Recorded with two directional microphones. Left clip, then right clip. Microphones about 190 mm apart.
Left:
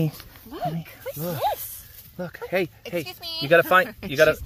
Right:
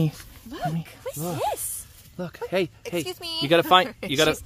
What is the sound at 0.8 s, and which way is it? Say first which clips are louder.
Speech: left 1 dB; 55° right (ahead or behind).